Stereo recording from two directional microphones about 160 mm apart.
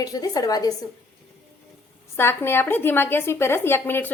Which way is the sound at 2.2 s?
15° left (ahead or behind).